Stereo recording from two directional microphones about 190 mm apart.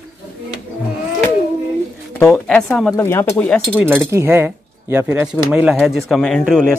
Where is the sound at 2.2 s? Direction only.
5° left (ahead or behind).